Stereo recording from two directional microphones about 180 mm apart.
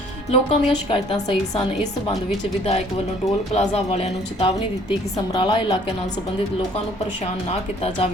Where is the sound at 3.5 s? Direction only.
35° left (ahead or behind).